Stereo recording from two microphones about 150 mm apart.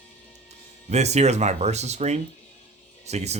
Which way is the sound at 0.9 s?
50° right (ahead or behind).